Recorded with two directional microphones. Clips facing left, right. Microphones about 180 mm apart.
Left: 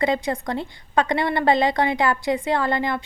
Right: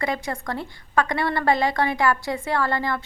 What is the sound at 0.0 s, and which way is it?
A woman's voice, 20° left (ahead or behind).